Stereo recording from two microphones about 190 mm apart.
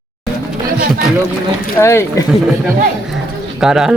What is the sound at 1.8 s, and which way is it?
Speech, 15° left (ahead or behind).